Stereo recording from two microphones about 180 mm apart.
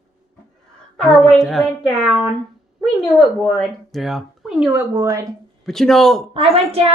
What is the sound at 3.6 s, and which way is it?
Speech, centre (ahead or behind).